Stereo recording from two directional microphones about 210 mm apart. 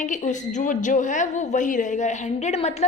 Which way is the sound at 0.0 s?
35° left (ahead or behind).